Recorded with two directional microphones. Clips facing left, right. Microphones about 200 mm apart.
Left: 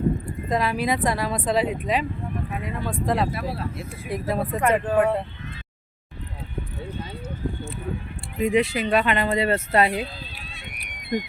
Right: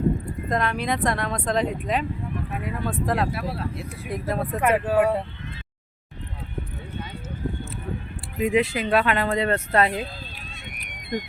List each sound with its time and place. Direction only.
0.5 s speech: 5° left (ahead or behind)
8.4 s speech: centre (ahead or behind)
10.8 s a sound: 50° right (ahead or behind)